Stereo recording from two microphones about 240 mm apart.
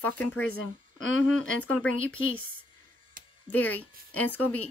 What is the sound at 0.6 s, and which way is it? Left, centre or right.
Speech, left.